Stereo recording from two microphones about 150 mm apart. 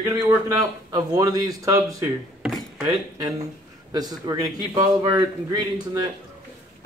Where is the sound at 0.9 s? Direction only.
25° right (ahead or behind).